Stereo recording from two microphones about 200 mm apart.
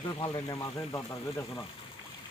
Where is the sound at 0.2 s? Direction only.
20° left (ahead or behind).